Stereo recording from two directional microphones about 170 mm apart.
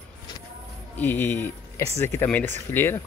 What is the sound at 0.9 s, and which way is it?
Speech, 10° left (ahead or behind).